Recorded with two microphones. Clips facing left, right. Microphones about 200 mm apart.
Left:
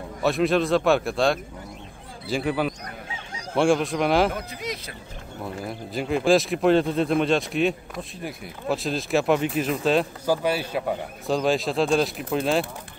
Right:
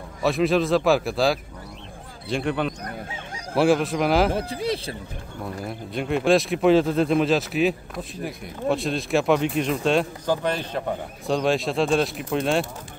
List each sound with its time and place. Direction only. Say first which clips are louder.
0.2 s speech: right 1 dB; centre (ahead or behind)
4.3 s speech: right 6 dB; 30° right (ahead or behind)
5.7 s speech: even; centre (ahead or behind)